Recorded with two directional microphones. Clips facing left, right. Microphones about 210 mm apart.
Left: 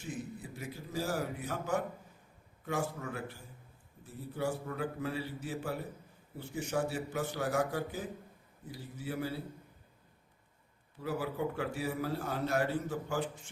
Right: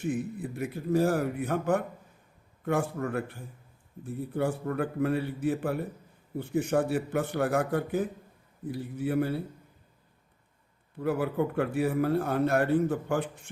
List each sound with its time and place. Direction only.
0.0 s a man's voice: 55° right (ahead or behind)
10.9 s a man's voice: 55° right (ahead or behind)